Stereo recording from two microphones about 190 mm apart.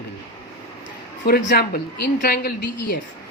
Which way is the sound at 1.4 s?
65° left (ahead or behind).